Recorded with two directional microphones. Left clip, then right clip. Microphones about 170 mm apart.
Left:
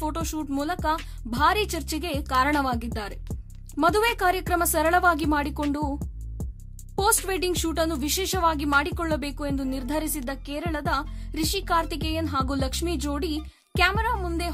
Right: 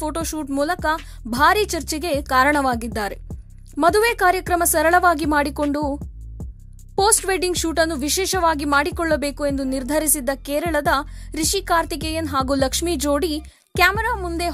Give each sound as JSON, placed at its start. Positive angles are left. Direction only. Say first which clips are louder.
{"t": 0.0, "sound": "a woman's voice", "louder": "right 4 dB", "side_deg": -25}
{"t": 3.7, "sound": "a woman's voice", "louder": "right 5 dB", "side_deg": -25}
{"t": 6.4, "sound": "music", "louder": "even", "side_deg": 0}
{"t": 7.2, "sound": "a woman's voice", "louder": "right 5 dB", "side_deg": -25}